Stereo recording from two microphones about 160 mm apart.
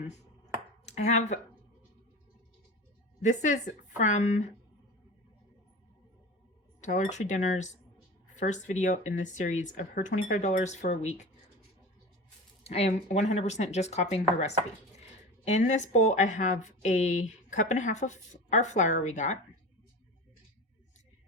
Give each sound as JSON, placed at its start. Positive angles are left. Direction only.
{"t": 0.9, "sound": "speech", "side_deg": 45}
{"t": 3.2, "sound": "a woman's voice", "side_deg": 50}
{"t": 6.8, "sound": "a woman's voice", "side_deg": 50}
{"t": 12.6, "sound": "a woman's voice", "side_deg": 40}